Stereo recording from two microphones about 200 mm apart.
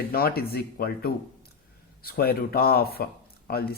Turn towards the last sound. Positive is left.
turn(degrees=50)  # may be behind; listen again after turning